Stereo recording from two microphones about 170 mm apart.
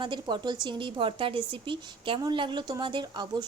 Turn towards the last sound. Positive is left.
turn(degrees=-25)  # may be behind; listen again after turning